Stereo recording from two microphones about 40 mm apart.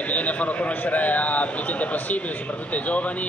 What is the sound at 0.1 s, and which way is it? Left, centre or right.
Speech, left.